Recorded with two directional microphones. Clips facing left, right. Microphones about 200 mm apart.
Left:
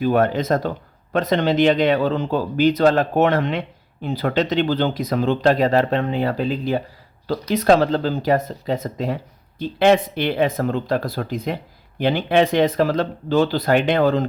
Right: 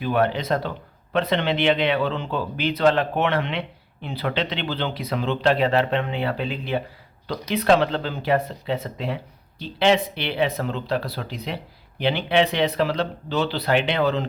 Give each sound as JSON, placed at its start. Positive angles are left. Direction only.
{"t": 0.0, "sound": "speech", "side_deg": 45}